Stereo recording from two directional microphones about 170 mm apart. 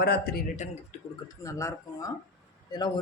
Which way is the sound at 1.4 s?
20° left (ahead or behind).